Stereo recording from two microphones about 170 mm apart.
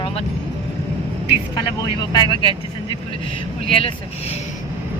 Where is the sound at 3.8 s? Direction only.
40° left (ahead or behind).